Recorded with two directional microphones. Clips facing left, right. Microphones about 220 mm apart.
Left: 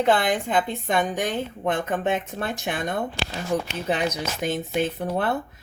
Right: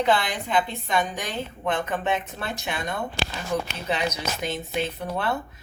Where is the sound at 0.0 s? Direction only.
50° left (ahead or behind).